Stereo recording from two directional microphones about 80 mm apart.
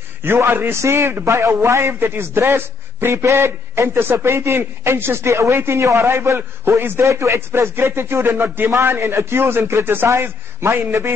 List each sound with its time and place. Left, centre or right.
0.2 s a man's voice: right